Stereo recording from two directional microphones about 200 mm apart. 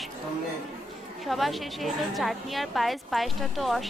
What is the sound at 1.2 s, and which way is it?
A woman's voice, centre (ahead or behind).